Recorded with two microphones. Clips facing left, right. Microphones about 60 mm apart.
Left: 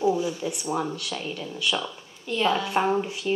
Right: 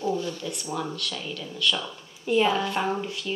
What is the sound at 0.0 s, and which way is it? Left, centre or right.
A woman's voice, centre.